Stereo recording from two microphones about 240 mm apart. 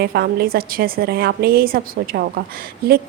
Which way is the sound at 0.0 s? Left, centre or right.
Right.